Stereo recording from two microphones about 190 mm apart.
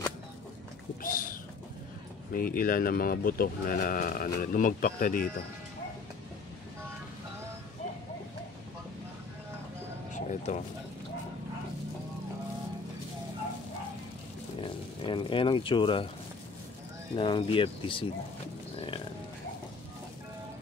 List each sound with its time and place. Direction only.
1.0 s a sound: 50° left (ahead or behind)
2.3 s speech: 50° left (ahead or behind)
10.1 s a sound: 40° left (ahead or behind)
14.6 s speech: 25° left (ahead or behind)
17.1 s speech: 25° left (ahead or behind)
18.8 s livestock: 30° left (ahead or behind)